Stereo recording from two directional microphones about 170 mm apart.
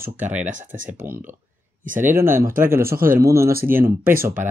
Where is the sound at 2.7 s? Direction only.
15° right (ahead or behind).